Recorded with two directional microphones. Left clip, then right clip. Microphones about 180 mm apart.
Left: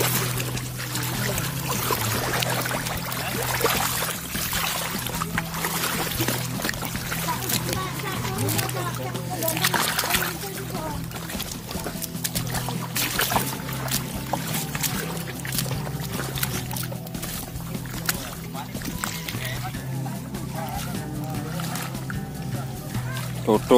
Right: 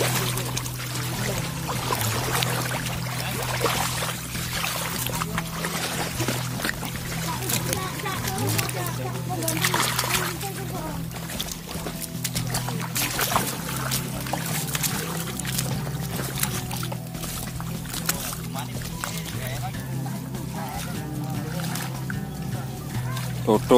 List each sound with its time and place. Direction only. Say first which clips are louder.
0.0 s a sound: even; 60° left (ahead or behind)
3.5 s pour: left 1 dB; 65° left (ahead or behind)
9.6 s music: even; 20° left (ahead or behind)
13.0 s music: left 2 dB; 25° left (ahead or behind)
23.5 s music: even; centre (ahead or behind)